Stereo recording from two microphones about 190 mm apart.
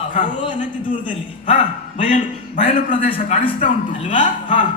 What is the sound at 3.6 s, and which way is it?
Speech, 40° left (ahead or behind).